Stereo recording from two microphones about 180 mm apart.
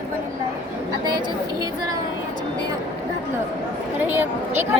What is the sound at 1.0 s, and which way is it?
Speech, 25° right (ahead or behind).